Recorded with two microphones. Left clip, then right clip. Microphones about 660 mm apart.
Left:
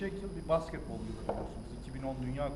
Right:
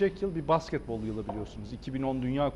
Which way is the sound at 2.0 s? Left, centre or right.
Right.